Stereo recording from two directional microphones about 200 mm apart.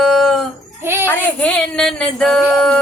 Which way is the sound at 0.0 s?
Centre (ahead or behind).